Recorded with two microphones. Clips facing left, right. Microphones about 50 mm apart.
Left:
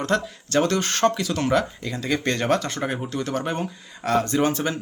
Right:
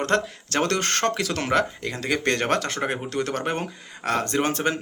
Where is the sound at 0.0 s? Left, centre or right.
Right.